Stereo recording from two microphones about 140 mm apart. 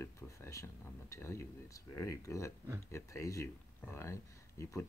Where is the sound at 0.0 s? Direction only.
20° left (ahead or behind).